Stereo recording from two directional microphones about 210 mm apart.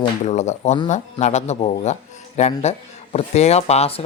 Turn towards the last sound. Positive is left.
turn(degrees=30)  # may be behind; listen again after turning